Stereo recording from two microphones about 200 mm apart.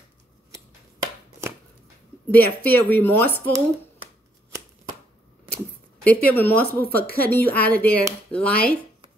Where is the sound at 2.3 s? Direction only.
10° left (ahead or behind).